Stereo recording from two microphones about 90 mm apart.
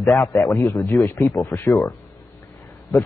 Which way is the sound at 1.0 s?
40° left (ahead or behind).